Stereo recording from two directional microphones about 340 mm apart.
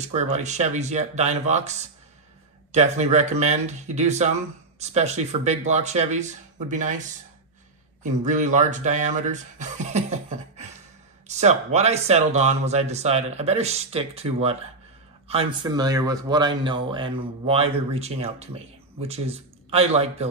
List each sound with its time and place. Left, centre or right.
0.0 s speech: centre
11.2 s speech: centre